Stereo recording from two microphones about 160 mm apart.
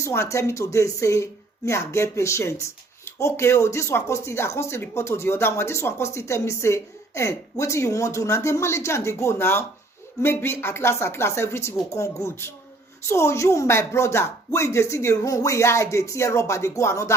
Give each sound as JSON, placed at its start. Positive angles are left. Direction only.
{"t": 0.0, "sound": "speech", "side_deg": 15}